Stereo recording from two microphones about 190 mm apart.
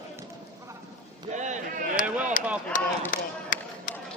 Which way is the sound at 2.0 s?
5° right (ahead or behind).